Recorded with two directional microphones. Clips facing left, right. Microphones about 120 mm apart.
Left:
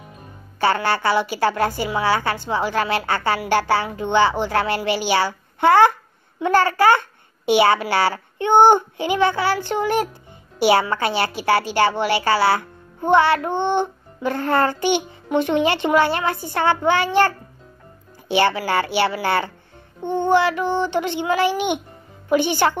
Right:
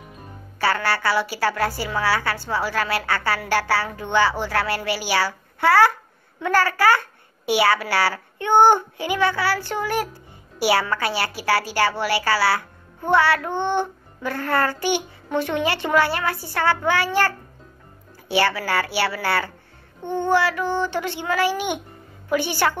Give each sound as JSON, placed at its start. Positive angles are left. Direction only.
{"t": 0.6, "sound": "a woman's voice", "side_deg": 25}
{"t": 18.3, "sound": "a woman's voice", "side_deg": 20}